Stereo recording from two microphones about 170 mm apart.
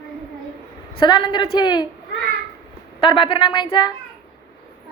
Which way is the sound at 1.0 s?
25° left (ahead or behind).